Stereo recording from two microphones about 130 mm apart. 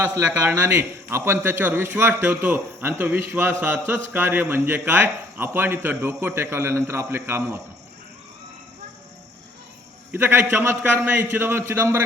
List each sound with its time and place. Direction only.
0.1 s a man's voice: 15° right (ahead or behind)
10.1 s a man's voice: 15° right (ahead or behind)